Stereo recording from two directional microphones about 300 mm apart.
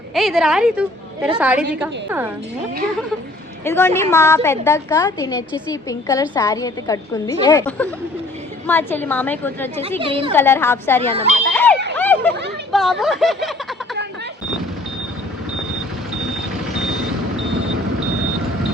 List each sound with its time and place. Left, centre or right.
0.1 s a woman's voice: centre
3.6 s a woman's voice: centre
10.0 s a woman's voice: centre
10.3 s a woman's voice: centre
11.5 s a sound: centre
12.7 s speech: centre